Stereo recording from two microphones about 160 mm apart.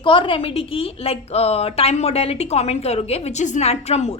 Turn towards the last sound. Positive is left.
turn(degrees=40)  # may be behind; listen again after turning